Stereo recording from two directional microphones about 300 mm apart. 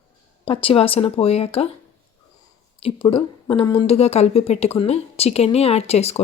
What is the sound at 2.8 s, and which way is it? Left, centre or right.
A woman's voice, centre.